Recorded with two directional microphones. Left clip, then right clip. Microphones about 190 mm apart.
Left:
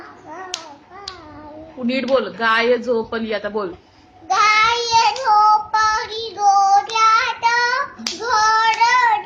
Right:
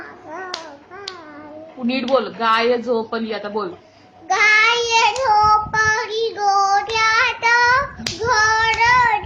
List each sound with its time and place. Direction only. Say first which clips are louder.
2.4 s a woman's voice: even; 10° left (ahead or behind)
4.3 s child singing: even; 15° right (ahead or behind)